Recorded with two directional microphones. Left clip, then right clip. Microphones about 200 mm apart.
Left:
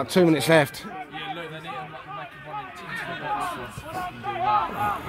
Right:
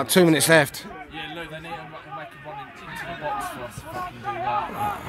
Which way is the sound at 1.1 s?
35° right (ahead or behind).